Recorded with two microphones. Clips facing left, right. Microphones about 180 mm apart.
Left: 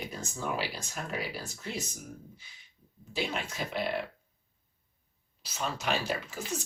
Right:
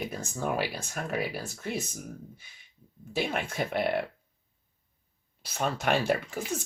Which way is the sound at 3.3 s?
55° right (ahead or behind).